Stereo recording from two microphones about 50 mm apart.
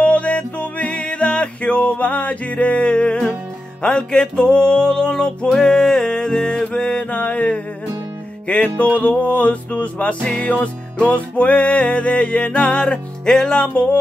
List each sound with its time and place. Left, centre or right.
0.0 s music: left